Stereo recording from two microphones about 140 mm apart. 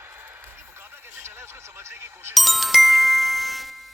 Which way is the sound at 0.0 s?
15° right (ahead or behind).